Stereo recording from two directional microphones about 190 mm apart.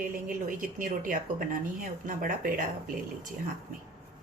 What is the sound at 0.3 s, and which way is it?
Speech, 45° right (ahead or behind).